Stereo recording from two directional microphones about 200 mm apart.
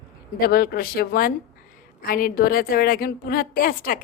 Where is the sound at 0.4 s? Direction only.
50° left (ahead or behind).